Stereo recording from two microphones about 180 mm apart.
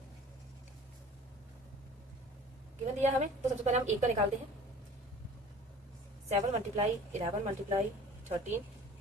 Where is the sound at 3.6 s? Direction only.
40° right (ahead or behind).